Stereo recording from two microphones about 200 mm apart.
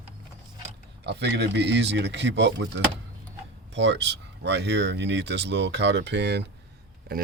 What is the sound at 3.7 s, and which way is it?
Speech, 60° right (ahead or behind).